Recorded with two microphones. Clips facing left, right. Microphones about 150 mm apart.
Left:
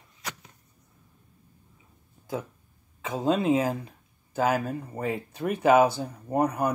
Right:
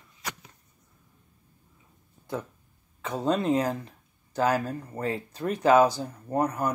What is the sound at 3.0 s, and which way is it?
Speech, centre (ahead or behind).